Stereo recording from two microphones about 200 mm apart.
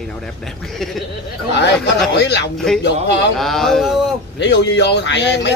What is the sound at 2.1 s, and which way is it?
Speech, 60° left (ahead or behind).